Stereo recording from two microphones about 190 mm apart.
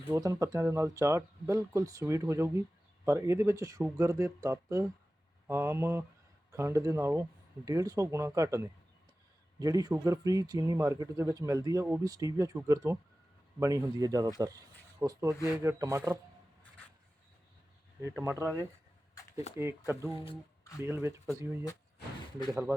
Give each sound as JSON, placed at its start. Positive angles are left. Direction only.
{"t": 0.1, "sound": "speech", "side_deg": -15}
{"t": 18.0, "sound": "speech", "side_deg": -15}
{"t": 20.3, "sound": "a sound", "side_deg": 20}
{"t": 20.8, "sound": "speech", "side_deg": -10}